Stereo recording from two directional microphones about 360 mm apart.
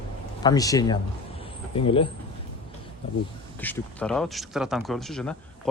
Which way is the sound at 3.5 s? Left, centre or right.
Centre.